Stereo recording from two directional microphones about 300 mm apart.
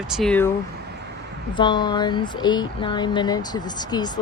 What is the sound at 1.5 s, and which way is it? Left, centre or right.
Speech, centre.